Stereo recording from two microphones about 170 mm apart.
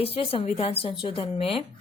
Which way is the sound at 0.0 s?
35° left (ahead or behind).